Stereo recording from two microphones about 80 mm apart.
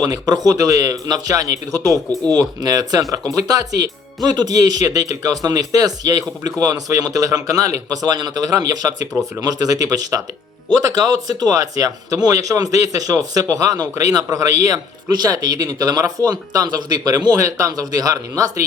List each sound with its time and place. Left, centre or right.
0.0 s speech: right
15.1 s speech: right